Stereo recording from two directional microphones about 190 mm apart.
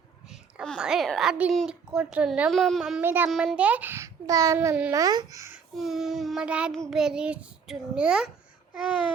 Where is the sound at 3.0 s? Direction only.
10° right (ahead or behind).